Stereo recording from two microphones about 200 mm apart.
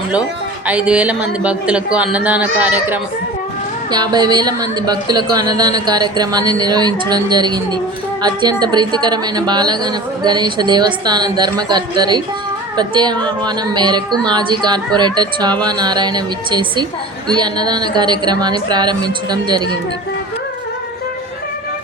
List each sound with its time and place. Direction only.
0.7 s speech: 5° right (ahead or behind)
3.9 s a woman's voice: 20° right (ahead or behind)